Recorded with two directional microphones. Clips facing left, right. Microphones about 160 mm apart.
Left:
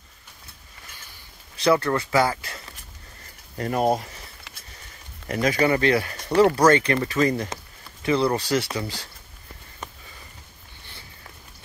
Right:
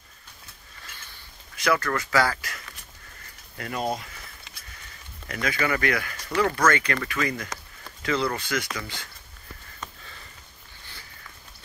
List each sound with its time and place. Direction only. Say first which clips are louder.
1.6 s speech: left 5 dB; 30° left (ahead or behind)
3.5 s speech: left 7 dB; 40° left (ahead or behind)
5.3 s speech: left 6 dB; 35° left (ahead or behind)